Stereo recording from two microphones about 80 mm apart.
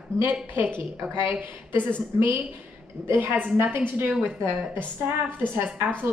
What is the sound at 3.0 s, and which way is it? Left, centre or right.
A woman's voice, right.